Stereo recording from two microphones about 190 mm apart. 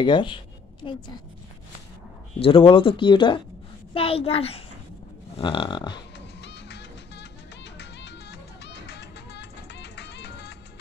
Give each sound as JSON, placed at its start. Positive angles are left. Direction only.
{"t": 0.0, "sound": "speech", "side_deg": 25}
{"t": 2.3, "sound": "a child's voice", "side_deg": 30}
{"t": 6.1, "sound": "music", "side_deg": 65}